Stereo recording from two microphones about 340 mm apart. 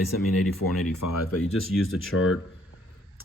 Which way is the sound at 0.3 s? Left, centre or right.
Left.